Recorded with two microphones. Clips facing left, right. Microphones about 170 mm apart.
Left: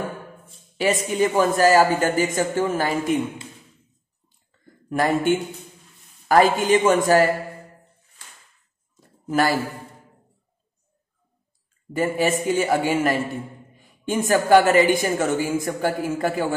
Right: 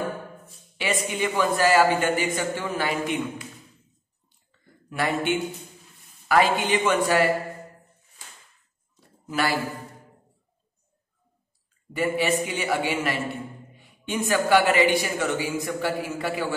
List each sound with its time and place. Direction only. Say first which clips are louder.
0.7 s a man's voice: left 6 dB; 40° left (ahead or behind)
4.8 s a man's voice: left 5 dB; 45° left (ahead or behind)
9.3 s speech: left 5 dB; 45° left (ahead or behind)
11.9 s speech: left 2 dB; 45° left (ahead or behind)